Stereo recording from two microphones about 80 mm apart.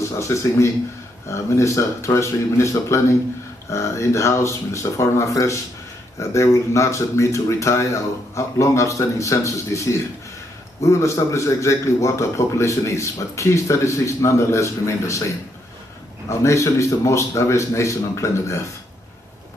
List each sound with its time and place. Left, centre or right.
0.0 s a man's voice: left